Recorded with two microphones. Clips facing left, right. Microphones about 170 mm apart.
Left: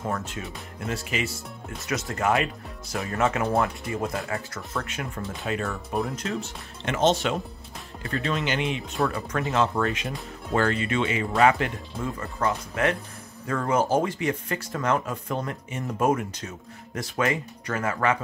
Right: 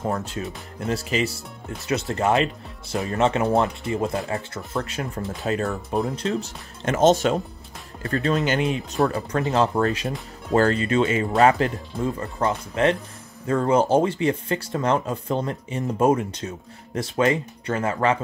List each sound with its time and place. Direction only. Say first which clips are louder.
0.0 s speech: right 4 dB; 30° right (ahead or behind)